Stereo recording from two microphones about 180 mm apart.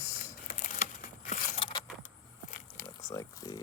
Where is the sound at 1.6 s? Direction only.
25° left (ahead or behind).